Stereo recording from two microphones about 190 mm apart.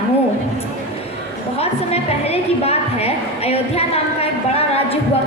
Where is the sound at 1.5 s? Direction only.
30° left (ahead or behind).